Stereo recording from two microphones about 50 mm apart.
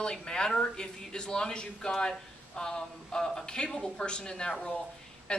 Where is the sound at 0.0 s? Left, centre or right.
Centre.